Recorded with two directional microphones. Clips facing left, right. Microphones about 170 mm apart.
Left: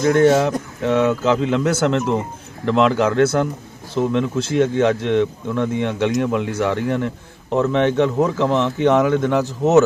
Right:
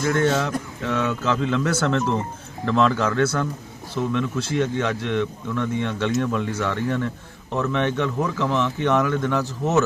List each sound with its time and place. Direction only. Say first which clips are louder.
0.0 s a man's voice: left 7 dB; 20° left (ahead or behind)